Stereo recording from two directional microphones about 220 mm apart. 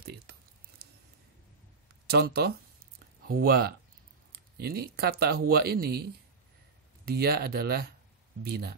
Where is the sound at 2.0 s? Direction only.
45° right (ahead or behind).